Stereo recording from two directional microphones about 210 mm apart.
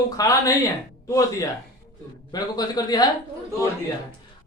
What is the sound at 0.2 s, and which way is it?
A man's voice, 15° left (ahead or behind).